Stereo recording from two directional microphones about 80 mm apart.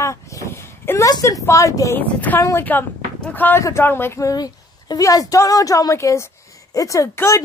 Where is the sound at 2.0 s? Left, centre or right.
Left.